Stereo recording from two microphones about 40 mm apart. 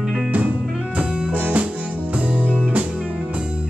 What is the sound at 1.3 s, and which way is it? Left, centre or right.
Music, right.